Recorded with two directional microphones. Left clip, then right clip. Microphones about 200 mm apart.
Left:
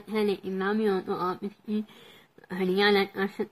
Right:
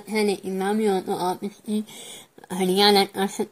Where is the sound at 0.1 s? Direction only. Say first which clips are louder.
Right 4 dB; 20° right (ahead or behind).